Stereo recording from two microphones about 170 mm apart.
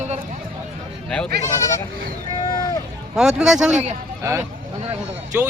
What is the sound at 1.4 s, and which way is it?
Speech, 20° left (ahead or behind).